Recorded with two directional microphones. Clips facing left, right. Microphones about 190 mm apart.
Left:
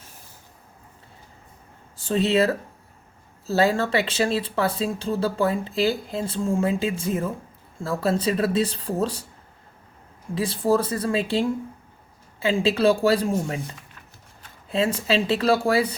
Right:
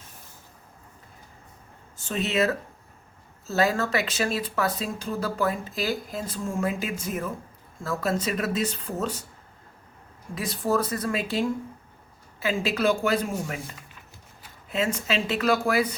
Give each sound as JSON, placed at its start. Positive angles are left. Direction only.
{"t": 2.0, "sound": "speech", "side_deg": 35}
{"t": 10.3, "sound": "speech", "side_deg": 30}
{"t": 14.7, "sound": "speech", "side_deg": 30}